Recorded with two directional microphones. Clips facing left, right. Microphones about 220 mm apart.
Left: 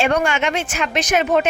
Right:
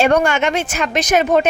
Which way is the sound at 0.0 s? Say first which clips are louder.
Right 4 dB; 40° right (ahead or behind).